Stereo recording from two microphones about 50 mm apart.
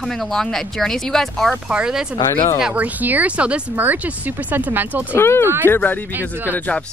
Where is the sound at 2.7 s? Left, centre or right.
Right.